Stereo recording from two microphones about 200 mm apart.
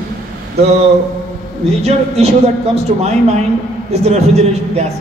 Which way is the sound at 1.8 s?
30° right (ahead or behind).